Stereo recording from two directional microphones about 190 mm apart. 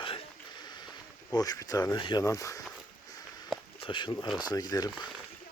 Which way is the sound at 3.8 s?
25° left (ahead or behind).